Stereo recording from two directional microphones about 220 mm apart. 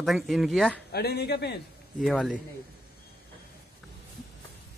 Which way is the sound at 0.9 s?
45° left (ahead or behind).